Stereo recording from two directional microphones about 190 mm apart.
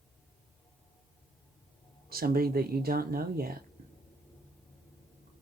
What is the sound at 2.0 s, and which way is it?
Speech, 50° right (ahead or behind).